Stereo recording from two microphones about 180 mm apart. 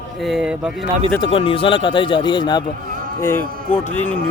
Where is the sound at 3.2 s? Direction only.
10° left (ahead or behind).